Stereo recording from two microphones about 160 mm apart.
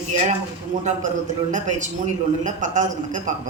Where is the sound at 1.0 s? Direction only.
50° right (ahead or behind).